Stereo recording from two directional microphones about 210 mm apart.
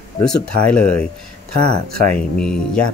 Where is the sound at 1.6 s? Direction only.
50° right (ahead or behind).